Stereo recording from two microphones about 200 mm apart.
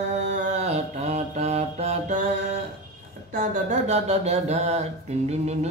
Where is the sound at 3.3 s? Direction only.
40° right (ahead or behind).